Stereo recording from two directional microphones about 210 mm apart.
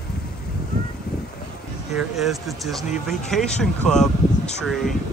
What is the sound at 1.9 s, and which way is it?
Speech, centre (ahead or behind).